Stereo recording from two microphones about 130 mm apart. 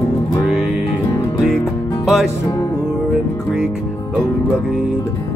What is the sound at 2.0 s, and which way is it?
Music, centre (ahead or behind).